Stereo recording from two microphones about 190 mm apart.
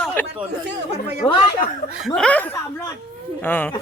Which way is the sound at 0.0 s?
10° left (ahead or behind).